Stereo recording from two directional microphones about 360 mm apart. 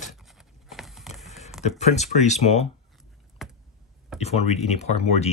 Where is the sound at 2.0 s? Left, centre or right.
Centre.